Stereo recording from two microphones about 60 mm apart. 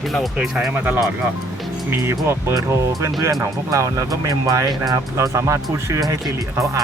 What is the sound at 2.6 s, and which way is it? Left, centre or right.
Speech, right.